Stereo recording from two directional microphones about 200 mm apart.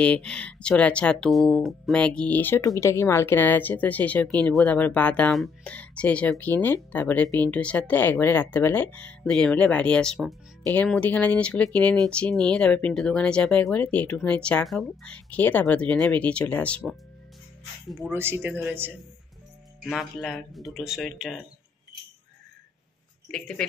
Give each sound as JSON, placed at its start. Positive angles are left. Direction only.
{"t": 0.0, "sound": "speech", "side_deg": 5}
{"t": 17.8, "sound": "speech", "side_deg": -5}
{"t": 19.8, "sound": "speech", "side_deg": 0}
{"t": 23.3, "sound": "speech", "side_deg": 5}